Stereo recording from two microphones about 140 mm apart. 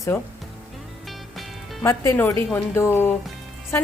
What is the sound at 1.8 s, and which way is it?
Speech, 20° left (ahead or behind).